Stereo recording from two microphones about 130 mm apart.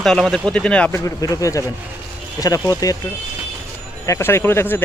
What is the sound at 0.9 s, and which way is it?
Speech, 25° left (ahead or behind).